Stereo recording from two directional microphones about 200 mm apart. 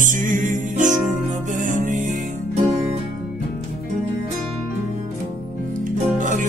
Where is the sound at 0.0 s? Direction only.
40° right (ahead or behind).